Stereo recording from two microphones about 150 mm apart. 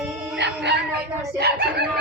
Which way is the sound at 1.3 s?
90° right.